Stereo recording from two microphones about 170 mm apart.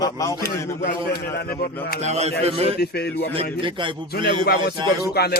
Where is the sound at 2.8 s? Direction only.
70° left (ahead or behind).